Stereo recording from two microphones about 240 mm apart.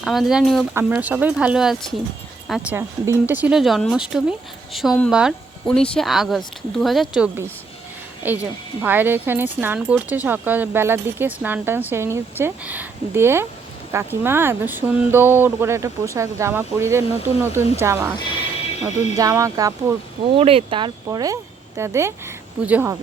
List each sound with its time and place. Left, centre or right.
0.0 s speech: centre
19.1 s speech: centre
20.3 s speech: right; by 23.0 s centre